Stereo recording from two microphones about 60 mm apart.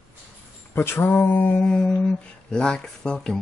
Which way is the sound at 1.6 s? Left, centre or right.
Centre.